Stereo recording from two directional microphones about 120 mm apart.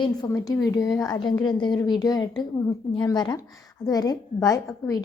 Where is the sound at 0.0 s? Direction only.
30° left (ahead or behind).